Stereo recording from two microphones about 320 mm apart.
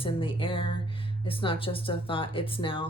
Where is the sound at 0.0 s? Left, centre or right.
Centre.